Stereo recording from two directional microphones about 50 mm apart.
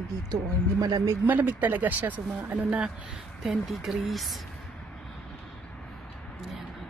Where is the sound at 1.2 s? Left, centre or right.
Right.